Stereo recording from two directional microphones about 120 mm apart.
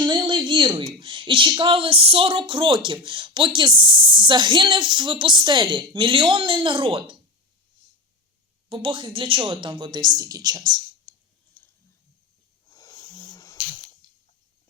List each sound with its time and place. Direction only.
0.0 s speech: 40° right (ahead or behind)
8.7 s speech: 45° right (ahead or behind)
12.7 s snake: 35° left (ahead or behind)